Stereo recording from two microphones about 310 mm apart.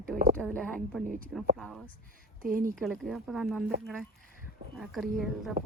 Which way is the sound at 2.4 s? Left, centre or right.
Right.